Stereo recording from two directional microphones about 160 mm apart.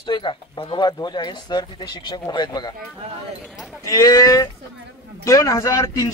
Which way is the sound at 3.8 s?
20° left (ahead or behind).